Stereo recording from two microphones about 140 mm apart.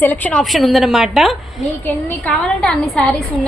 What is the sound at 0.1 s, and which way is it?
A woman's voice, 10° left (ahead or behind).